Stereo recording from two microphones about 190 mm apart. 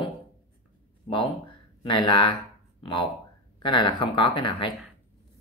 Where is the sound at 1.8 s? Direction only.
25° left (ahead or behind).